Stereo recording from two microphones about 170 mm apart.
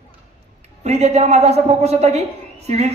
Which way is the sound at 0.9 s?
40° right (ahead or behind).